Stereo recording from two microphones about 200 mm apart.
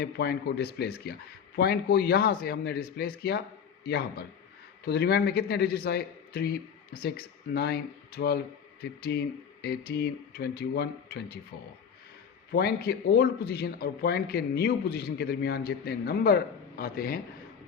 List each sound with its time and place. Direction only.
0.0 s speech: 55° left (ahead or behind)
12.5 s speech: 50° left (ahead or behind)